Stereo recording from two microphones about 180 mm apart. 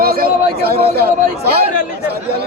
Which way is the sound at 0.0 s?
55° right (ahead or behind).